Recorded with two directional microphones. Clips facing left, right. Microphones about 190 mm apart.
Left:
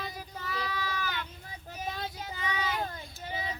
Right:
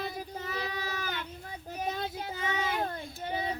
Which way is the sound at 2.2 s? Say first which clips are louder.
Right 2 dB; 50° right (ahead or behind).